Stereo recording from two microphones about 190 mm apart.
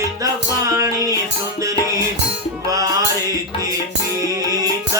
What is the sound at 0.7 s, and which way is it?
Music, 15° right (ahead or behind).